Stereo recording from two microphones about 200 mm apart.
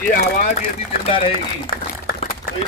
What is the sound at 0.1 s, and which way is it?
Speech, 45° left (ahead or behind).